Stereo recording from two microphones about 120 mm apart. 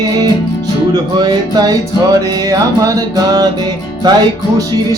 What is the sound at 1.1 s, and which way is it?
Music, 35° right (ahead or behind).